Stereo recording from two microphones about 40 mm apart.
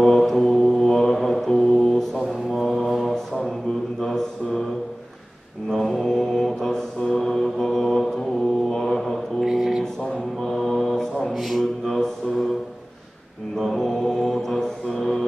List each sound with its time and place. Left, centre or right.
0.0 s mantra: centre
2.2 s mantra: centre
4.0 s mantra: centre
5.7 s mantra: centre
9.4 s a sound: centre
10.4 s mantra: centre
11.3 s a sound: centre
13.6 s mantra: centre